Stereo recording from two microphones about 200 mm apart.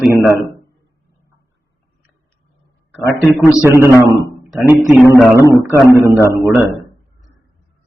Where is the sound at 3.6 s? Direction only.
15° right (ahead or behind).